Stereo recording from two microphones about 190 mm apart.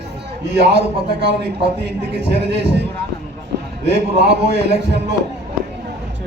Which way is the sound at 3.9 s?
65° right (ahead or behind).